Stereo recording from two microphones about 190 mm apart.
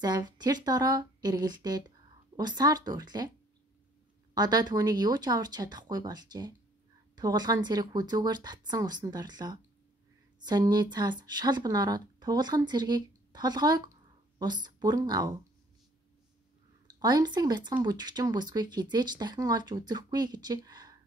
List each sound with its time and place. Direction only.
0.0 s speech: 20° right (ahead or behind)
4.3 s speech: 20° right (ahead or behind)
16.8 s speech: 20° right (ahead or behind)